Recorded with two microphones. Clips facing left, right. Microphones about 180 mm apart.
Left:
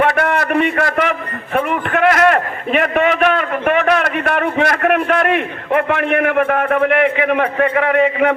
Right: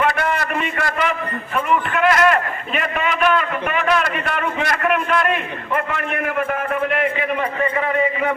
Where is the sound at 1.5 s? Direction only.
60° left (ahead or behind).